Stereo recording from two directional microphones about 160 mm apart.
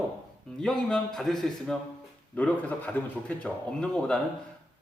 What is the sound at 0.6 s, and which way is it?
A man's voice, 5° left (ahead or behind).